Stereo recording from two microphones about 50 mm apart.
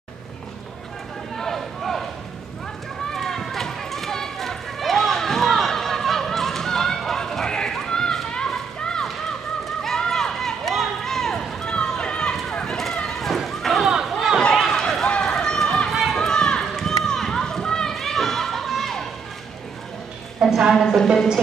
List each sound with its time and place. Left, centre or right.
1.3 s a sound: centre
3.1 s run: centre
8.5 s children playing: centre
9.8 s run: centre
13.2 s run: centre
14.0 s a sound: centre
14.7 s run: centre
16.2 s run: centre
20.4 s a sound: centre